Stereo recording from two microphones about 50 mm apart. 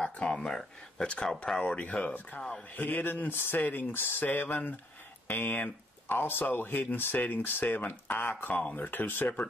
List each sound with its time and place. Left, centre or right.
0.0 s speech: left
1.6 s speech: left
2.7 s speech: left